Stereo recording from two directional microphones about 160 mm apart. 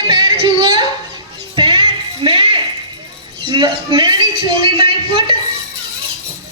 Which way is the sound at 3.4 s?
35° right (ahead or behind).